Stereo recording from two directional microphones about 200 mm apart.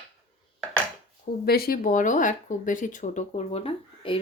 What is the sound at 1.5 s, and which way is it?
Speech, 50° left (ahead or behind).